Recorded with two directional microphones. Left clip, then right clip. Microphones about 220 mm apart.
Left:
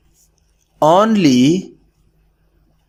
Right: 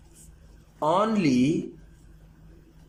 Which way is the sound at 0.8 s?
45° left (ahead or behind).